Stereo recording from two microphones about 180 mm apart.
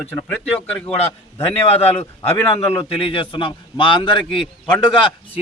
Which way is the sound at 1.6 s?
35° left (ahead or behind).